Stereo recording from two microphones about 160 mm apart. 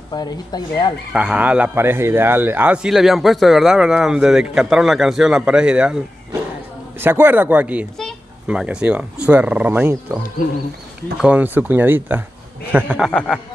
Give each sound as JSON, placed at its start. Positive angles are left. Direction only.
{"t": 0.1, "sound": "speech", "side_deg": 25}
{"t": 1.1, "sound": "a man's voice", "side_deg": -5}
{"t": 13.1, "sound": "speech", "side_deg": 5}